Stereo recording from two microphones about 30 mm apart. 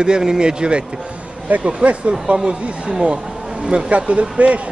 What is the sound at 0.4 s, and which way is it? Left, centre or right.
Speech, right.